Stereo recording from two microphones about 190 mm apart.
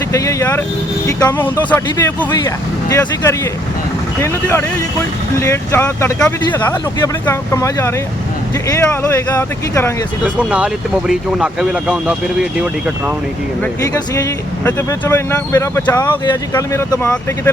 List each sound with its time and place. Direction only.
0.1 s speech: 15° left (ahead or behind)
9.3 s speech: 15° left (ahead or behind)
10.2 s speech: 5° right (ahead or behind)
13.9 s speech: 20° left (ahead or behind)